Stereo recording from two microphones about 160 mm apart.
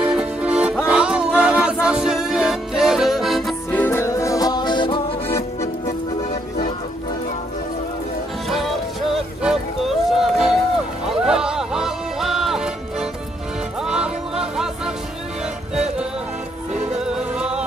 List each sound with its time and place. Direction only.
0.0 s music: 5° right (ahead or behind)
3.7 s music: 15° left (ahead or behind); by 5.0 s 30° left (ahead or behind)
8.5 s music: centre (ahead or behind)
15.7 s music: 5° right (ahead or behind)